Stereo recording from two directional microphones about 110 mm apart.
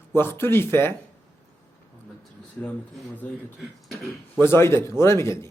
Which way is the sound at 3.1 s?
15° left (ahead or behind).